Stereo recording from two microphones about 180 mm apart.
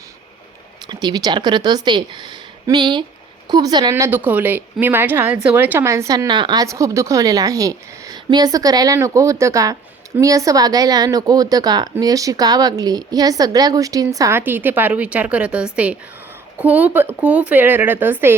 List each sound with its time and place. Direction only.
0.9 s a woman's voice: 20° right (ahead or behind)